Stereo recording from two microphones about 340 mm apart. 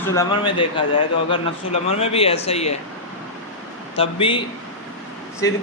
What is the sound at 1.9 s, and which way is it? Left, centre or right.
Speech, centre.